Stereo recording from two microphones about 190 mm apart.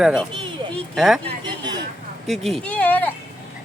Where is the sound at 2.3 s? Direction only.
Centre (ahead or behind).